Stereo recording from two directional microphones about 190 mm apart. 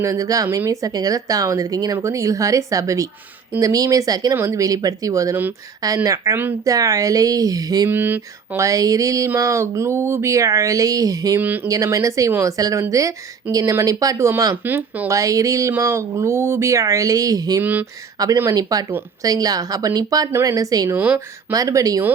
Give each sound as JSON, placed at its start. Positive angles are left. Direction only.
{"t": 0.0, "sound": "speech", "side_deg": -15}